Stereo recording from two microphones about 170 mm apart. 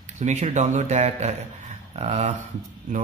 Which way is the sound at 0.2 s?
40° right (ahead or behind).